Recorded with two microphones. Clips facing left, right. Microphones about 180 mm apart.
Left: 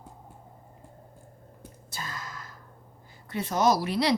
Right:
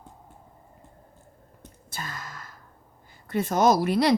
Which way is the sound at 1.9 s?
55° right (ahead or behind).